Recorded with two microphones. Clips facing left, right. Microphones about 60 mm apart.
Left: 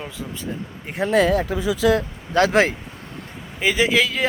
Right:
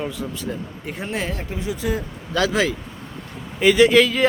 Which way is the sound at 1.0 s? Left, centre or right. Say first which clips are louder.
Left 11 dB; left.